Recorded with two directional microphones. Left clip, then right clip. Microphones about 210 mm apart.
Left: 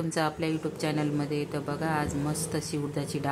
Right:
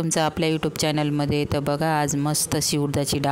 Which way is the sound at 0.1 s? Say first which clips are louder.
Right 7 dB; 50° right (ahead or behind).